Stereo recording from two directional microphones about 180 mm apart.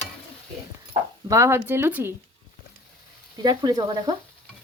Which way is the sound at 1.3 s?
15° right (ahead or behind).